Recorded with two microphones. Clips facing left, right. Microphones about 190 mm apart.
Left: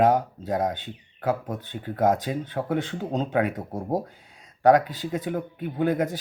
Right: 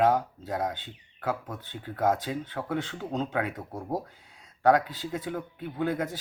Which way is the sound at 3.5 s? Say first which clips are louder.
Left 5 dB; 40° left (ahead or behind).